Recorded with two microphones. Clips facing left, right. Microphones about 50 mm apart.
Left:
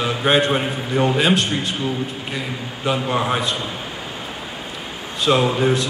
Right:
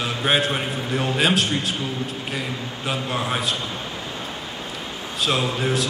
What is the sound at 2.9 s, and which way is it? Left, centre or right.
Speech, centre.